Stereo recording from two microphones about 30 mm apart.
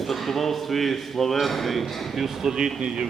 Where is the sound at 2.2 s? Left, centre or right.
Centre.